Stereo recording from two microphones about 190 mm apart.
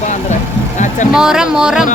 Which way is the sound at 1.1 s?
5° right (ahead or behind).